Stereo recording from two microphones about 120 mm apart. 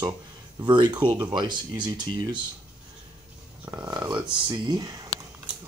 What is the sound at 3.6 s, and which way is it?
Speech, 35° right (ahead or behind).